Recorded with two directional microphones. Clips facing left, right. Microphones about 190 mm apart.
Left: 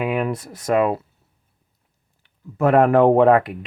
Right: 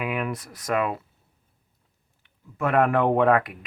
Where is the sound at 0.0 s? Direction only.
30° left (ahead or behind).